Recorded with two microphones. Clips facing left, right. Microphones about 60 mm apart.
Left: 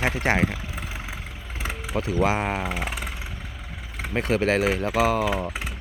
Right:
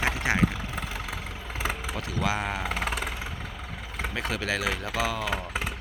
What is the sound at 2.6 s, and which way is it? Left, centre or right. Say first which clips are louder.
Vehicle: even; centre.